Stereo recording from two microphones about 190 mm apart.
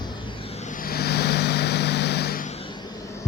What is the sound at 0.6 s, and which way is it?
Vehicle, 45° left (ahead or behind).